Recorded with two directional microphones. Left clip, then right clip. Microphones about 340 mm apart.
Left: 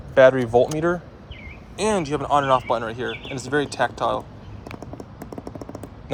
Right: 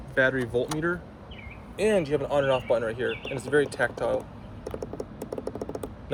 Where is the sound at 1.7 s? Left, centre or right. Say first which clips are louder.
Left 1 dB; centre.